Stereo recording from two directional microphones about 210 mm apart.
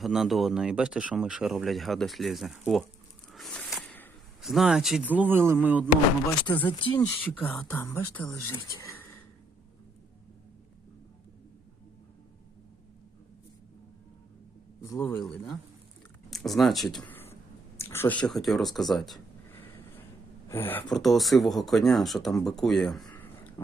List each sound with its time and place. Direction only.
0.0 s speech: centre (ahead or behind)
3.3 s a sound: 5° left (ahead or behind)
5.5 s music: 5° right (ahead or behind)
6.7 s speech: 25° left (ahead or behind)
6.9 s speech: 10° left (ahead or behind)
14.8 s a man's voice: 15° left (ahead or behind)
15.2 s speech: centre (ahead or behind)
20.5 s speech: 10° left (ahead or behind)